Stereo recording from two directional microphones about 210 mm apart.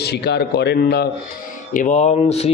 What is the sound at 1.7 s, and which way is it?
Speech, 35° left (ahead or behind).